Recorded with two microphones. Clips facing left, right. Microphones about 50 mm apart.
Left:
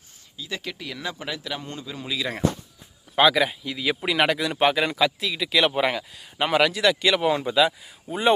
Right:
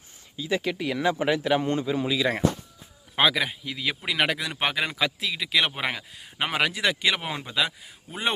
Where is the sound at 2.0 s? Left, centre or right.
Centre.